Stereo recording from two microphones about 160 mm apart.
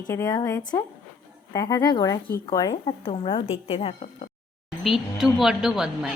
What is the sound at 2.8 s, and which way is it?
A woman's voice, 35° left (ahead or behind).